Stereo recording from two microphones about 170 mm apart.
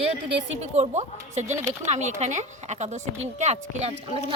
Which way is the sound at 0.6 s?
40° right (ahead or behind).